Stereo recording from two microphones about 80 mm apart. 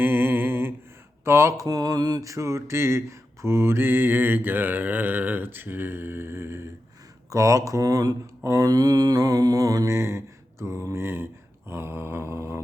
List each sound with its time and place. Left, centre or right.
0.0 s a sound: right
1.2 s mantra: right
7.3 s mantra: right
11.0 s speech: right
11.7 s mantra: right